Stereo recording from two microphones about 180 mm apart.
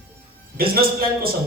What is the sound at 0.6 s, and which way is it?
Speech, 55° right (ahead or behind).